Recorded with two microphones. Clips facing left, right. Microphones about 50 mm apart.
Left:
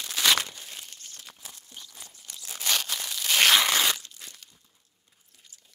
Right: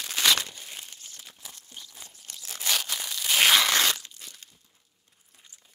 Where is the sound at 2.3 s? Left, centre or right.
Centre.